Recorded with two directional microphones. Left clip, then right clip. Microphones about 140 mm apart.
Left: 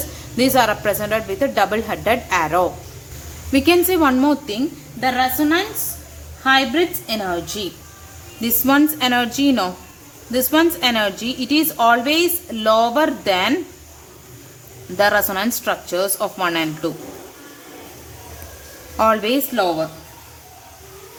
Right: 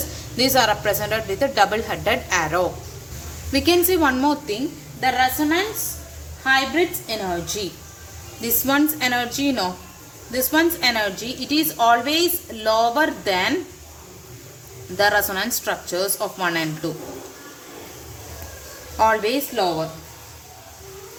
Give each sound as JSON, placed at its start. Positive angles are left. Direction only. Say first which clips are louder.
{"t": 0.3, "sound": "a woman's voice", "louder": "left 2 dB", "side_deg": 35}
{"t": 8.4, "sound": "a woman's voice", "louder": "left 4 dB", "side_deg": 40}
{"t": 14.9, "sound": "a woman's voice", "louder": "left 2 dB", "side_deg": 40}
{"t": 18.9, "sound": "a woman's voice", "louder": "left 2 dB", "side_deg": 40}